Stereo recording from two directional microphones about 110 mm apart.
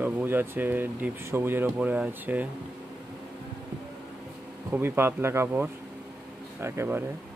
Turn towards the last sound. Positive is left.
turn(degrees=-20)  # may be behind; listen again after turning